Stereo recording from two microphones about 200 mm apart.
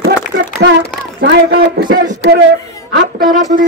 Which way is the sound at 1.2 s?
50° right (ahead or behind).